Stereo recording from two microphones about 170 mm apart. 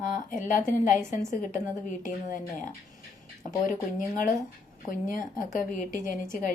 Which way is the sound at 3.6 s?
50° left (ahead or behind).